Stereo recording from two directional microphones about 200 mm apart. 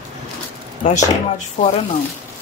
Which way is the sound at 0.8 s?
40° left (ahead or behind).